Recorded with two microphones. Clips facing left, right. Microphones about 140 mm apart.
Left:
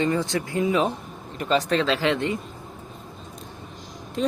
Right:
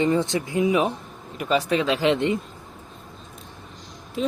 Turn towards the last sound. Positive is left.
turn(degrees=-5)  # may be behind; listen again after turning